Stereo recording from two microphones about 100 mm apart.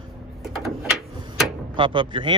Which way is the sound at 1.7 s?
55° right (ahead or behind).